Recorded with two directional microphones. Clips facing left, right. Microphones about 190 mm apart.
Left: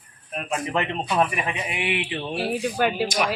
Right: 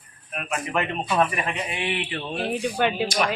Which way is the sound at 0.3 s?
25° left (ahead or behind).